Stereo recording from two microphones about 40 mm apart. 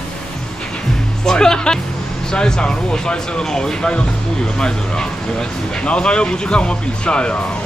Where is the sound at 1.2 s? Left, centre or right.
Centre.